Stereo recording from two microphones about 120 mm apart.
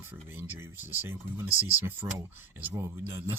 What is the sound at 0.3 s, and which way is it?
Speech, 15° right (ahead or behind).